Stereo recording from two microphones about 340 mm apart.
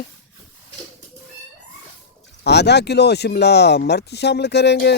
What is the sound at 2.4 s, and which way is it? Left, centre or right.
Speech, left.